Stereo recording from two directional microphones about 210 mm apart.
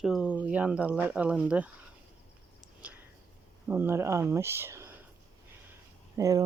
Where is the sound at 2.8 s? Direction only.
5° right (ahead or behind).